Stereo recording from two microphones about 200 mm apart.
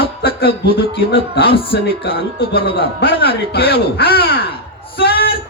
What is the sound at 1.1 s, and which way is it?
Speech, 55° left (ahead or behind).